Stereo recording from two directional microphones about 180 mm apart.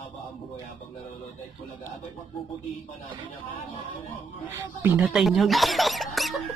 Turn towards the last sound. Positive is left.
turn(degrees=0)  # may be behind; listen again after turning